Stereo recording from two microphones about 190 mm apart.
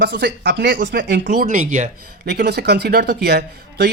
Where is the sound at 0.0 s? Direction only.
65° right (ahead or behind).